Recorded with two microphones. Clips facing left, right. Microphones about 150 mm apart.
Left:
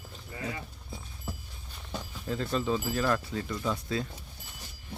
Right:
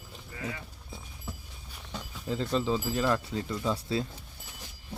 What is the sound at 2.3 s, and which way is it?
Speech, 20° right (ahead or behind).